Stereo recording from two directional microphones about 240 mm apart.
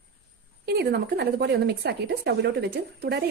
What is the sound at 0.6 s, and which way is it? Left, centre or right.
Speech, right.